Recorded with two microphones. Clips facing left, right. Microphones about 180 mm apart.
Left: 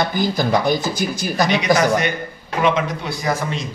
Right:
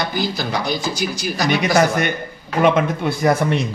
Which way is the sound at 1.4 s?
50° right (ahead or behind).